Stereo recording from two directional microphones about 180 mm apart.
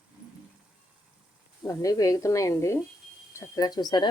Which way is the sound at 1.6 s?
20° left (ahead or behind).